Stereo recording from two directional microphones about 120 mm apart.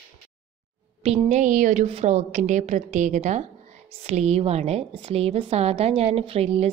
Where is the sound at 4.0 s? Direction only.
65° right (ahead or behind).